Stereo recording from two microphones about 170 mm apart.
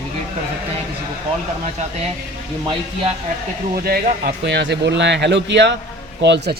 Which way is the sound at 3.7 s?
60° right (ahead or behind).